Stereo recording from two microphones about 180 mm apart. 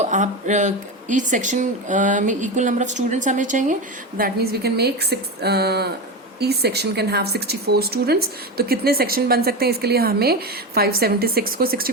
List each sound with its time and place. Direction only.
0.0 s speech: 45° right (ahead or behind)
4.2 s speech: 60° right (ahead or behind)